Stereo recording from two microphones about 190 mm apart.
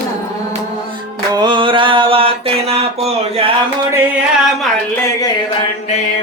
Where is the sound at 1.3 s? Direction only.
25° right (ahead or behind).